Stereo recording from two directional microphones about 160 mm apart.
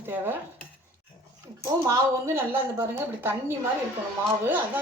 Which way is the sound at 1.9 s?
15° right (ahead or behind).